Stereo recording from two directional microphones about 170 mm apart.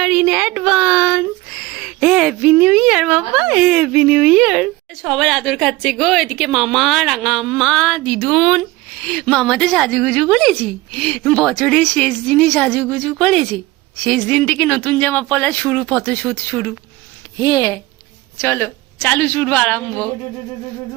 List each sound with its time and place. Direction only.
0.0 s a woman's voice: 5° right (ahead or behind)